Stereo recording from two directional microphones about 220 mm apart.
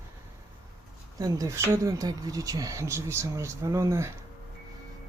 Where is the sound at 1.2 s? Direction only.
15° right (ahead or behind).